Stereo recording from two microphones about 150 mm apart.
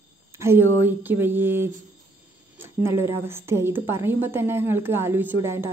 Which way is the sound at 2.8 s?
15° right (ahead or behind).